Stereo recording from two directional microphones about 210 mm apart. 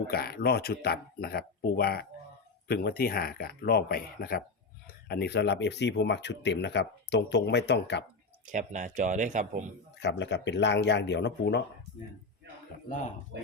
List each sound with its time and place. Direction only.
0.1 s speech: 50° left (ahead or behind)
8.4 s speech: 35° right (ahead or behind)
10.0 s speech: 55° left (ahead or behind)